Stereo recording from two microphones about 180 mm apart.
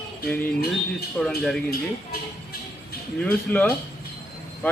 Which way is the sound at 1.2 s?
5° left (ahead or behind).